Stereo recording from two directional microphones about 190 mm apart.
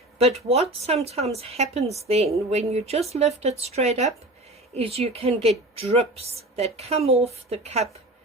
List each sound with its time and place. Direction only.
0.2 s speech: 35° right (ahead or behind)